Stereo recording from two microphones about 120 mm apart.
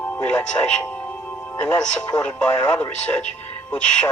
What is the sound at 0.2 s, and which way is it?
A woman's voice, 10° left (ahead or behind).